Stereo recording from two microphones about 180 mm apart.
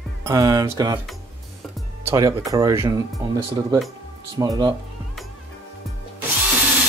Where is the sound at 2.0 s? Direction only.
20° right (ahead or behind).